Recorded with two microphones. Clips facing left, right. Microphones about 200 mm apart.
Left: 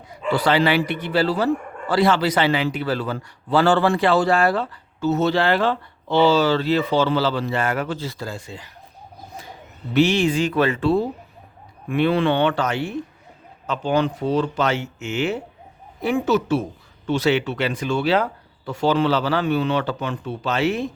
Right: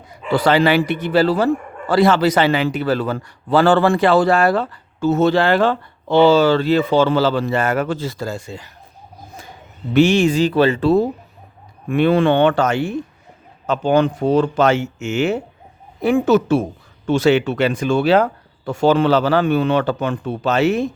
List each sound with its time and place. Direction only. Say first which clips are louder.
0.3 s a man's voice: right 4 dB; 50° right (ahead or behind)
9.9 s a man's voice: right 4 dB; 50° right (ahead or behind)